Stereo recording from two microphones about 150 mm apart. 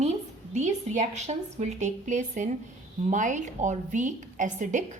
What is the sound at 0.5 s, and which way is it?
A woman's voice, 50° right (ahead or behind).